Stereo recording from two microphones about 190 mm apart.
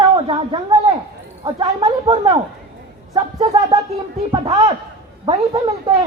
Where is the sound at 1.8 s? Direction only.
35° right (ahead or behind).